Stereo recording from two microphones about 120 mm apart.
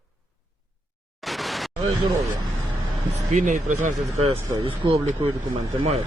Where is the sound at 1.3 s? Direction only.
Centre (ahead or behind).